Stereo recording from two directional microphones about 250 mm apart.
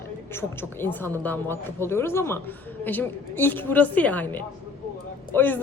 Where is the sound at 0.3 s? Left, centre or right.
Centre.